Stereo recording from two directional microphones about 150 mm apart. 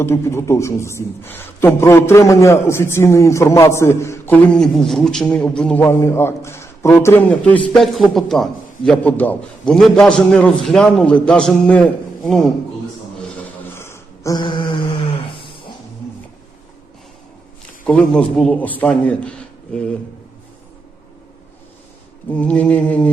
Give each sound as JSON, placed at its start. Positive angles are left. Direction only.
{"t": 0.0, "sound": "a man's voice", "side_deg": 15}
{"t": 4.5, "sound": "a man's voice", "side_deg": 5}
{"t": 5.8, "sound": "a man's voice", "side_deg": 15}
{"t": 13.7, "sound": "a sound", "side_deg": 15}
{"t": 14.4, "sound": "mantra", "side_deg": 35}
{"t": 15.2, "sound": "a sound", "side_deg": 35}
{"t": 18.1, "sound": "a man's voice", "side_deg": 5}
{"t": 22.3, "sound": "a man's voice", "side_deg": 10}